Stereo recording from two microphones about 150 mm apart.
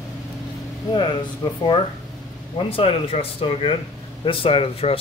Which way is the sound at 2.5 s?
40° left (ahead or behind).